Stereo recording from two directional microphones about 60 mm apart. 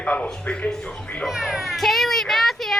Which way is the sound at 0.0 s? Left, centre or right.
Left.